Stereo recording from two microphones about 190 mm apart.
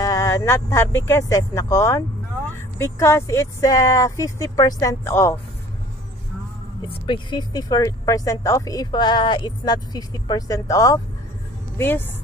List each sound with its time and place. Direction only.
0.0 s speech: 15° left (ahead or behind)
7.1 s speech: 25° left (ahead or behind)